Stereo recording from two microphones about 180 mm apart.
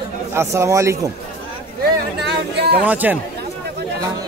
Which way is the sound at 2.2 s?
65° right (ahead or behind).